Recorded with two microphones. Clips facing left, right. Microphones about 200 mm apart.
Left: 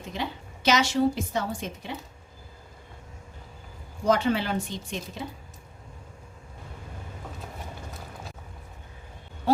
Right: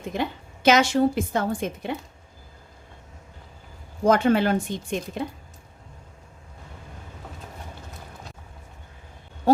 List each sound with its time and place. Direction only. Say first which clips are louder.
0.1 s a woman's voice: right 5 dB; 50° right (ahead or behind)
4.0 s a woman's voice: right 5 dB; 50° right (ahead or behind)